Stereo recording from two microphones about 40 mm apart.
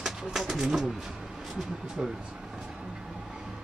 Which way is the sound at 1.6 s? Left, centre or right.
Centre.